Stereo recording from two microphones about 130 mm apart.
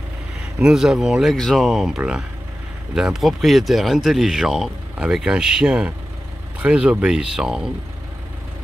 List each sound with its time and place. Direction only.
0.6 s speech: 5° right (ahead or behind)